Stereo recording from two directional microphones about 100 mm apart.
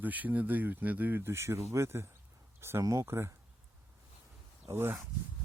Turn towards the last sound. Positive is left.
turn(degrees=-25)  # may be behind; listen again after turning